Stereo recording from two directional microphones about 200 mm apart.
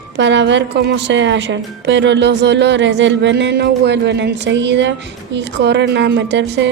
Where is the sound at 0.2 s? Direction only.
65° right (ahead or behind).